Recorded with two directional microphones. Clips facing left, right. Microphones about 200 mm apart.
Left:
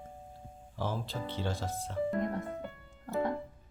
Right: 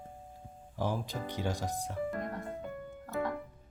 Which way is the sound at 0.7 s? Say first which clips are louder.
Right 2 dB; 15° right (ahead or behind).